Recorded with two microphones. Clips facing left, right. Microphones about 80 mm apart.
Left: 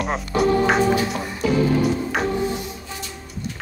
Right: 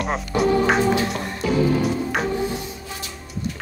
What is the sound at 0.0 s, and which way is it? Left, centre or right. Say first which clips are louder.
Speech: left 1 dB; centre.